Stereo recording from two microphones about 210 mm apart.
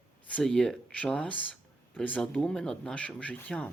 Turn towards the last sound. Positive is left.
turn(degrees=5)  # may be behind; listen again after turning